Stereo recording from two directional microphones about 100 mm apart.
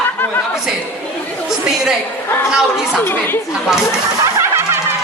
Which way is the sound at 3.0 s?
20° left (ahead or behind).